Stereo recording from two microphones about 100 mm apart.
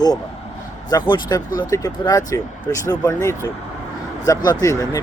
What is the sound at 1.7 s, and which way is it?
Speech, 40° left (ahead or behind).